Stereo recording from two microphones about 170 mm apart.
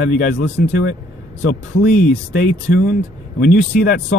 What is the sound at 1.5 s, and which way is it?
Speech, 45° left (ahead or behind).